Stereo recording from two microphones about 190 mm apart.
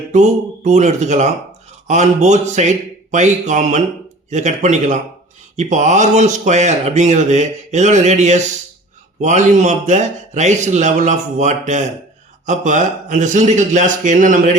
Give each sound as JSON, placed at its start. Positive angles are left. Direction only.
{"t": 0.1, "sound": "speech", "side_deg": -40}